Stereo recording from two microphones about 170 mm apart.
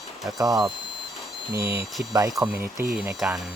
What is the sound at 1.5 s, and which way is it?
Speech, 15° right (ahead or behind).